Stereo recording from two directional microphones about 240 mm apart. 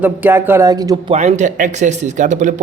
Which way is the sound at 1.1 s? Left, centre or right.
Right.